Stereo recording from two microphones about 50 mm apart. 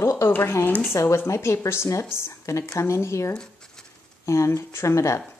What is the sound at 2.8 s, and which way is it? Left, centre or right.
Speech, left.